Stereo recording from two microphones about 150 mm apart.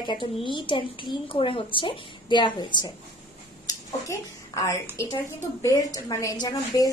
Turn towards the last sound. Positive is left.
turn(degrees=25)  # may be behind; listen again after turning